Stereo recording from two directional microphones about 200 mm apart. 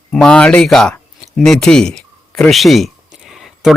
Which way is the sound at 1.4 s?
5° left (ahead or behind).